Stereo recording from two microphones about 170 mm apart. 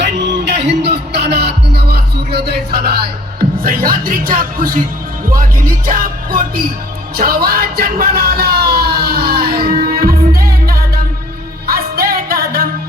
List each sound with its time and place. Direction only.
0.0 s music: 90° right; by 2.9 s 70° right (ahead or behind)
3.6 s speech: 60° right (ahead or behind)
7.2 s music: 60° right (ahead or behind)